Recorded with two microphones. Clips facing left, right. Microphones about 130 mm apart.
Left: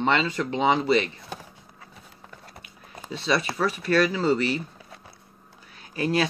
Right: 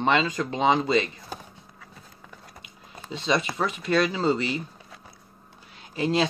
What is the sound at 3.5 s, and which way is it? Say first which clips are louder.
Speech: left 1 dB; 20° right (ahead or behind).